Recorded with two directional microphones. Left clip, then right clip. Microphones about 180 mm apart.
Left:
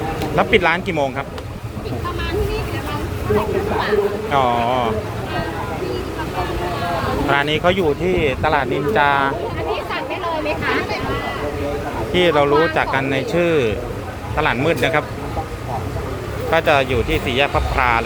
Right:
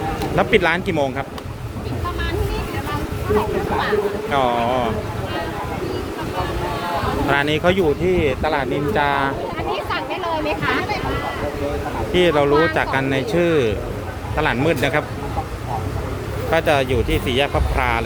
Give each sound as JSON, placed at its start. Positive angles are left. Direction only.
{"t": 0.3, "sound": "speech", "side_deg": -25}
{"t": 4.3, "sound": "speech", "side_deg": -30}
{"t": 7.3, "sound": "speech", "side_deg": -30}
{"t": 12.1, "sound": "speech", "side_deg": -25}
{"t": 16.5, "sound": "speech", "side_deg": -25}